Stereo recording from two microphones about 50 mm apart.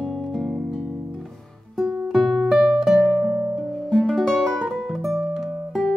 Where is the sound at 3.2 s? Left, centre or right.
Centre.